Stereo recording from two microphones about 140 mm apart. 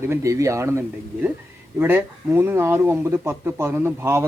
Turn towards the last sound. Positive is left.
turn(degrees=-20)  # may be behind; listen again after turning